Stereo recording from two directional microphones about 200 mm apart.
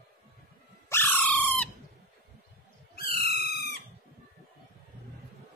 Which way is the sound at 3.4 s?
50° left (ahead or behind).